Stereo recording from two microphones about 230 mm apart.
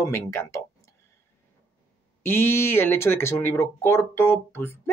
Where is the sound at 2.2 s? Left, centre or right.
Centre.